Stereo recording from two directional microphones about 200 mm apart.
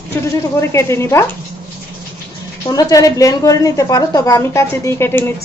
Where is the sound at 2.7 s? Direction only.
20° left (ahead or behind).